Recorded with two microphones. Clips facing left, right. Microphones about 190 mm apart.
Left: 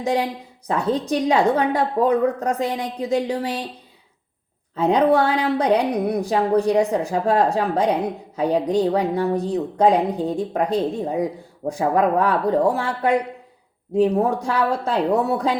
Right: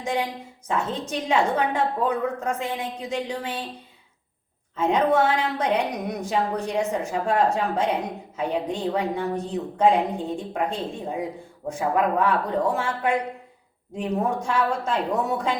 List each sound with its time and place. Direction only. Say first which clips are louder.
0.0 s a woman's voice: left 5 dB; 35° left (ahead or behind)
4.8 s a woman's voice: left 4 dB; 35° left (ahead or behind)